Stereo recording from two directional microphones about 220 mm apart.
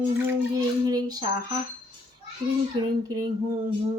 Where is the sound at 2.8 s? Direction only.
20° right (ahead or behind).